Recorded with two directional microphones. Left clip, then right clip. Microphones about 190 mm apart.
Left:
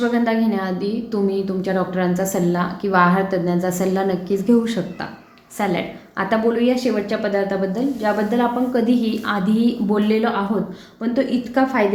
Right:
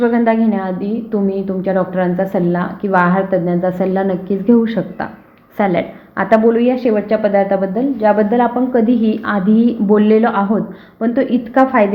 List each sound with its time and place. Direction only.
0.0 s a woman's voice: 15° right (ahead or behind)